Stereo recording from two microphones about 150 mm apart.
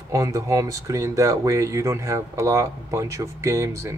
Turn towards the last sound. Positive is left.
turn(degrees=-20)  # may be behind; listen again after turning